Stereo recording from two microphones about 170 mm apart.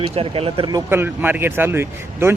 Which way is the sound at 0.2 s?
35° right (ahead or behind).